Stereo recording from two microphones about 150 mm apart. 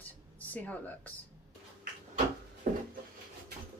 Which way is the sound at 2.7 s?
70° right (ahead or behind).